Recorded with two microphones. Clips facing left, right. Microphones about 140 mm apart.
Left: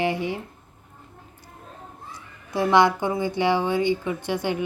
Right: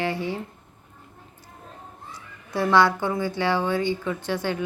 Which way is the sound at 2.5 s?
15° left (ahead or behind).